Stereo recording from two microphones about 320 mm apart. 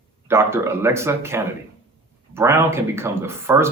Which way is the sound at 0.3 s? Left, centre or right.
Centre.